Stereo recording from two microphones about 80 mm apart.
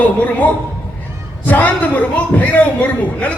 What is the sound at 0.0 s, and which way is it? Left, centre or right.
A man's voice, centre.